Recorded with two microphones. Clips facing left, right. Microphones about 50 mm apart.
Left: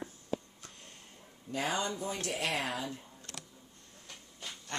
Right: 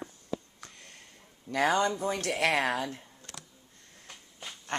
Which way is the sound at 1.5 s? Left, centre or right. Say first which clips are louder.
Right 8 dB; right.